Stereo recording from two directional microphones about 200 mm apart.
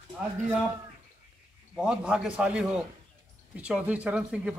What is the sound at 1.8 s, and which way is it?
A man's voice, 5° right (ahead or behind).